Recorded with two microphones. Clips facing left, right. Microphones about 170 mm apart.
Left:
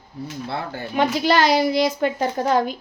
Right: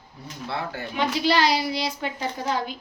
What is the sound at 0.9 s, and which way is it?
A woman's voice, 50° left (ahead or behind).